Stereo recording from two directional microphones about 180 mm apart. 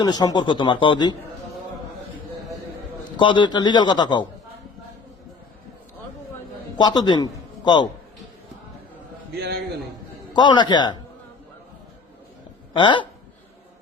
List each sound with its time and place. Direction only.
0.0 s speech: 20° left (ahead or behind)
3.2 s speech: 25° left (ahead or behind)
6.7 s a man's voice: 25° left (ahead or behind)
9.3 s a man's voice: 65° right (ahead or behind)
10.3 s speech: 25° left (ahead or behind)
12.7 s speech: 25° left (ahead or behind)